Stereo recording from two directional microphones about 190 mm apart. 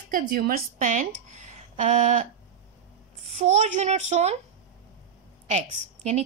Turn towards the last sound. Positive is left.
turn(degrees=-35)  # may be behind; listen again after turning